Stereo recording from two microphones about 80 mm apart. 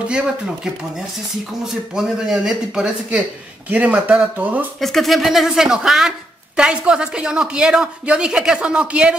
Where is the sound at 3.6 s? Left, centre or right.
Centre.